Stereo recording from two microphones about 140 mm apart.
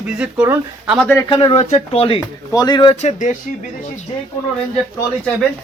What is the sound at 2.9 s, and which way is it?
Speech, 55° left (ahead or behind).